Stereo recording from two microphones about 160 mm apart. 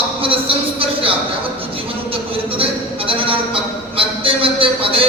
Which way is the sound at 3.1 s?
35° right (ahead or behind).